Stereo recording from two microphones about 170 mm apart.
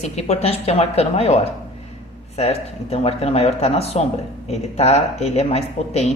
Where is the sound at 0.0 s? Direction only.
40° left (ahead or behind).